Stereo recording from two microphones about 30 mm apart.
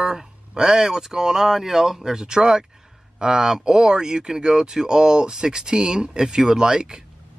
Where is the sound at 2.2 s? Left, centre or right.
Right.